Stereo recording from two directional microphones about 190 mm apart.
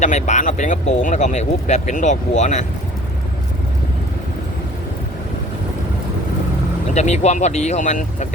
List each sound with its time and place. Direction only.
0.0 s speech: 40° left (ahead or behind)
6.9 s speech: 35° left (ahead or behind)